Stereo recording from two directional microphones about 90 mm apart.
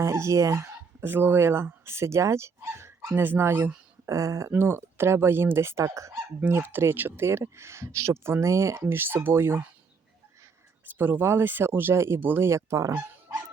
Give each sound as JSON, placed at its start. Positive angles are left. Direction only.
{"t": 0.0, "sound": "speech", "side_deg": -30}
{"t": 4.0, "sound": "speech", "side_deg": -35}
{"t": 4.5, "sound": "speech", "side_deg": -25}
{"t": 6.4, "sound": "speech", "side_deg": -20}
{"t": 10.8, "sound": "speech", "side_deg": -20}